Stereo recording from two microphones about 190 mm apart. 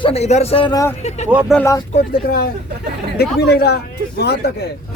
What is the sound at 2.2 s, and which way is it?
A man's voice, 55° left (ahead or behind).